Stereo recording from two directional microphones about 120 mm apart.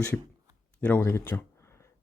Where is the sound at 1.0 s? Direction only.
20° left (ahead or behind).